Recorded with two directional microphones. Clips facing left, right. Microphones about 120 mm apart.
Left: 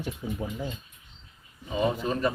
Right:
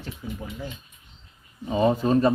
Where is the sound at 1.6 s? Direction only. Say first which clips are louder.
Right 6 dB; 35° right (ahead or behind).